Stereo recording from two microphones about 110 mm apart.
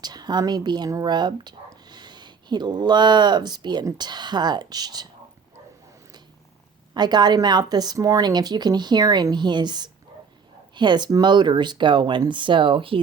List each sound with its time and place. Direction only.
0.0 s speech: 40° right (ahead or behind)
6.9 s a woman's voice: 40° right (ahead or behind)